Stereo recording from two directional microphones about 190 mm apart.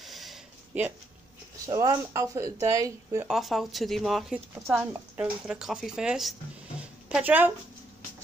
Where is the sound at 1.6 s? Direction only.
20° right (ahead or behind).